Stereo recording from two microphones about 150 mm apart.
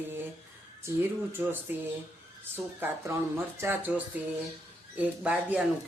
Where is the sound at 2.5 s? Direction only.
15° right (ahead or behind).